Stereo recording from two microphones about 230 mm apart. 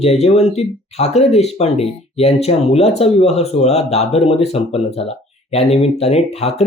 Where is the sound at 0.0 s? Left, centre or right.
Left.